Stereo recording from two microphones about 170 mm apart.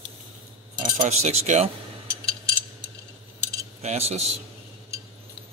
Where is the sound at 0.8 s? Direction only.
40° right (ahead or behind).